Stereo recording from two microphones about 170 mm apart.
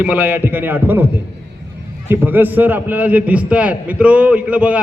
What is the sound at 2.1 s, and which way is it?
A man's voice, 10° right (ahead or behind).